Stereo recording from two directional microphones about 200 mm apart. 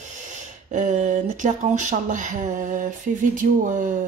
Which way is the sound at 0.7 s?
40° right (ahead or behind).